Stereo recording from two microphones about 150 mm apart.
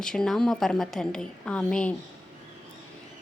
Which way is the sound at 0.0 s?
5° left (ahead or behind).